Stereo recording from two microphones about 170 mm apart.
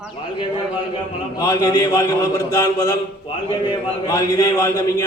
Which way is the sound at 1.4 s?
20° left (ahead or behind).